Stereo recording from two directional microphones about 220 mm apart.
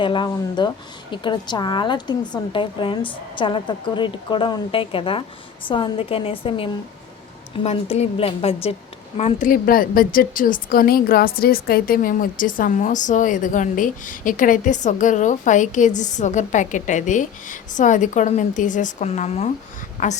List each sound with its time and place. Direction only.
0.0 s a woman's voice: 20° left (ahead or behind)